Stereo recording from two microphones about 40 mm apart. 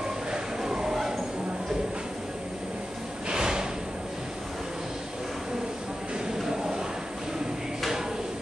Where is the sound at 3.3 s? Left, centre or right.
Centre.